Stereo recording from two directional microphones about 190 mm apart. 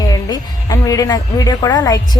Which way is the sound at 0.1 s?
20° left (ahead or behind).